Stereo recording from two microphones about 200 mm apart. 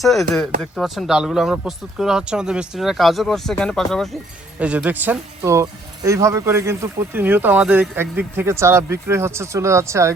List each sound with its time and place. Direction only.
0.0 s speech: centre (ahead or behind)